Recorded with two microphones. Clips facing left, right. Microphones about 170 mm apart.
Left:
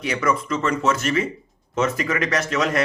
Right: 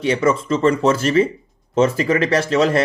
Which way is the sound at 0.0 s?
30° right (ahead or behind).